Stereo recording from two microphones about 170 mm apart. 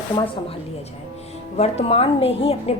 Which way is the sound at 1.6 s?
35° left (ahead or behind).